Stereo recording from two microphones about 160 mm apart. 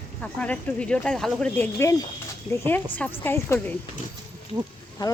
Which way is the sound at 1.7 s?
20° left (ahead or behind).